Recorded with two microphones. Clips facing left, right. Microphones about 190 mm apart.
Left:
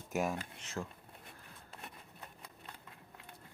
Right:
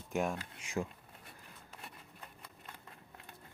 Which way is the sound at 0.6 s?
15° right (ahead or behind).